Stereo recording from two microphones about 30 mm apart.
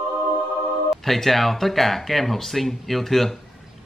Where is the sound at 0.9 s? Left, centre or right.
Centre.